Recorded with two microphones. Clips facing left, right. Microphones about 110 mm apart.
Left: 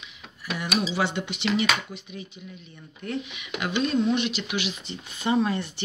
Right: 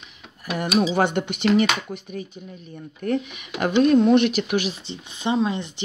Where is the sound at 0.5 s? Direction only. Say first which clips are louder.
Right 6 dB; 45° right (ahead or behind).